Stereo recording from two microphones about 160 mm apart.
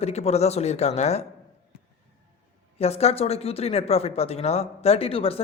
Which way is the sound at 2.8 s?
40° left (ahead or behind).